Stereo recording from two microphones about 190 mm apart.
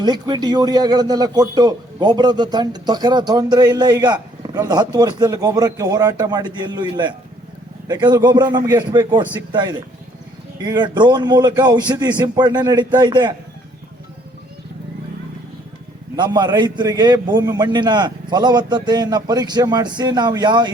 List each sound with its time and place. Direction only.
0.0 s a man's voice: 20° right (ahead or behind)
16.1 s a man's voice: 25° right (ahead or behind)